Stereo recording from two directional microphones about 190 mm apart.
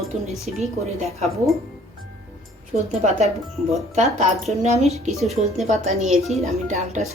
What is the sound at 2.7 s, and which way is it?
Speech, 35° right (ahead or behind).